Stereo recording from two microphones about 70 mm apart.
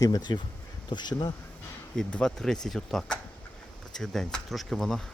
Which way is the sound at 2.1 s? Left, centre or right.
Centre.